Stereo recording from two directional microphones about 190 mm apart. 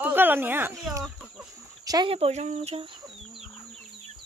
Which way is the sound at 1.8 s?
20° right (ahead or behind).